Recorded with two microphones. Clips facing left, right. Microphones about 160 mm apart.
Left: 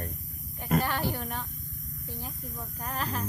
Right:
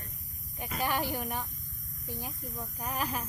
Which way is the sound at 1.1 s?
10° right (ahead or behind).